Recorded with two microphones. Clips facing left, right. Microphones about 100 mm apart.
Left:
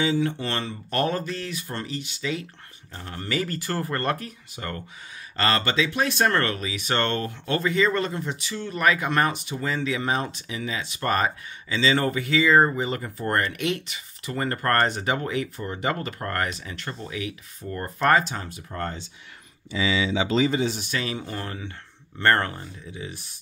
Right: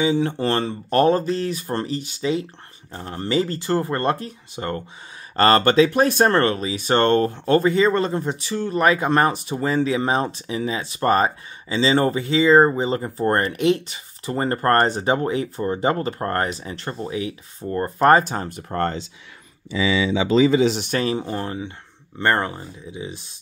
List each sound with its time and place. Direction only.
0.2 s speech: 35° right (ahead or behind)
5.3 s speech: 45° right (ahead or behind); by 18.0 s 30° right (ahead or behind)
18.0 s speech: 40° right (ahead or behind)
18.5 s speech: 55° right (ahead or behind); by 19.0 s 70° right (ahead or behind)
20.6 s speech: 70° right (ahead or behind)
20.9 s speech: 35° right (ahead or behind)